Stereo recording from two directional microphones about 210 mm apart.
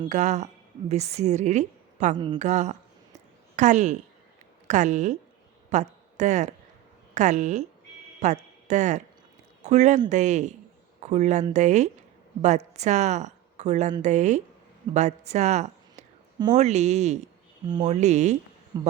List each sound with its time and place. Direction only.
0.1 s a woman's voice: 35° right (ahead or behind)
2.1 s speech: 20° right (ahead or behind)
2.4 s a woman's voice: 35° right (ahead or behind)
18.7 s speech: 20° right (ahead or behind)